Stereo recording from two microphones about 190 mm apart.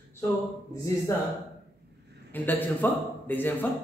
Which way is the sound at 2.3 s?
10° left (ahead or behind).